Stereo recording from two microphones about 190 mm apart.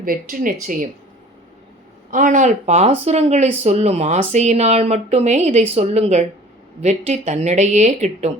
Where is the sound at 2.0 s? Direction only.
45° right (ahead or behind).